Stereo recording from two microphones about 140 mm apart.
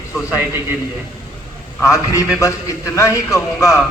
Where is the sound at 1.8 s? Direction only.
25° left (ahead or behind).